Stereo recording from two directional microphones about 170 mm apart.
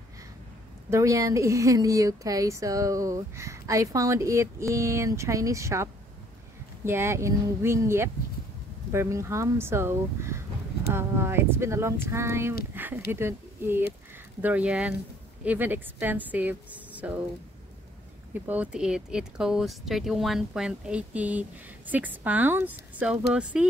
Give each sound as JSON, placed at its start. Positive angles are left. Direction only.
{"t": 0.8, "sound": "a woman's voice", "side_deg": -20}
{"t": 18.3, "sound": "a woman's voice", "side_deg": -10}